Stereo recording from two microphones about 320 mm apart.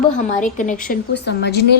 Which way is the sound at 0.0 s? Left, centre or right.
Left.